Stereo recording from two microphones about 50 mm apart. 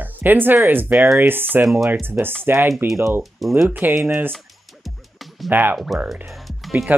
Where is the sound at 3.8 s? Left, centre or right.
Right.